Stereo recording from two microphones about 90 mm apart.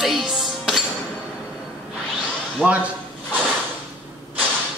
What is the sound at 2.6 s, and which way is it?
Speech, 15° right (ahead or behind).